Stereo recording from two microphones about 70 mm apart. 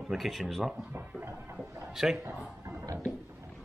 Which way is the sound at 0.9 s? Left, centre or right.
Right.